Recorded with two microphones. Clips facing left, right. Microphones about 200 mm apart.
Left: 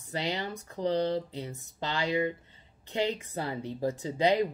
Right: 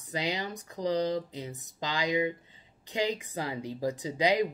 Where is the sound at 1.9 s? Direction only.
15° right (ahead or behind).